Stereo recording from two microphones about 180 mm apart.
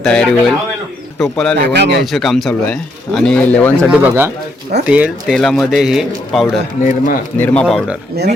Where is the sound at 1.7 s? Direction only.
70° right (ahead or behind).